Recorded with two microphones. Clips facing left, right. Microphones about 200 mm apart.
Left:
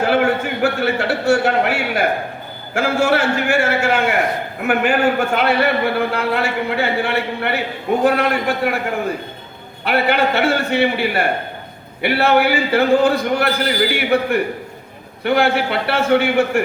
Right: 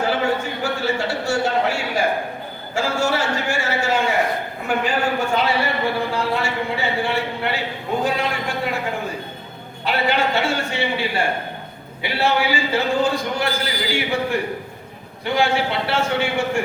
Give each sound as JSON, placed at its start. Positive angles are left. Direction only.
{"t": 0.0, "sound": "a sound", "side_deg": 60}
{"t": 2.7, "sound": "a man's voice", "side_deg": 60}
{"t": 9.8, "sound": "a man's voice", "side_deg": 60}